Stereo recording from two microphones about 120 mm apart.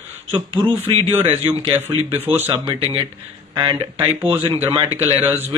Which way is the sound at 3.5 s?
45° right (ahead or behind).